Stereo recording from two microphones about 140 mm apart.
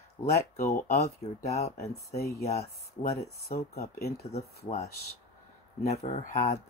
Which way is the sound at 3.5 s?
70° left (ahead or behind).